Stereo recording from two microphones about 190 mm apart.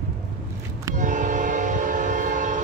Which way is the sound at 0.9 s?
40° right (ahead or behind).